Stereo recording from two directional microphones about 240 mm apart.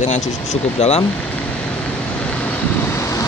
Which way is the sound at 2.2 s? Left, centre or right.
Centre.